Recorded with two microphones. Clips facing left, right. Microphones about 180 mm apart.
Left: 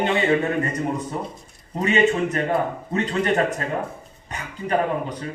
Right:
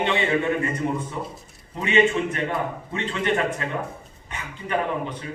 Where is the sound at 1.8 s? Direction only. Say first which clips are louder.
Left 1 dB; 40° left (ahead or behind).